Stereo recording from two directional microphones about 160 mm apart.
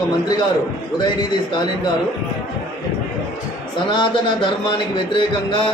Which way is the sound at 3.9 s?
30° left (ahead or behind).